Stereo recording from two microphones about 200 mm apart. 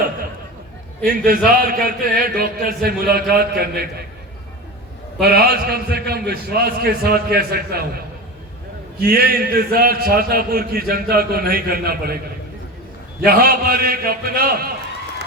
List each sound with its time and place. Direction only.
1.0 s a man's voice: 45° right (ahead or behind)
5.2 s a man's voice: 50° right (ahead or behind)
9.0 s a man's voice: 50° right (ahead or behind)
13.2 s a man's voice: 50° right (ahead or behind)